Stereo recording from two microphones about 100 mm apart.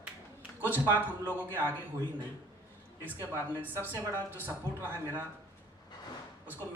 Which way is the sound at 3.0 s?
20° right (ahead or behind).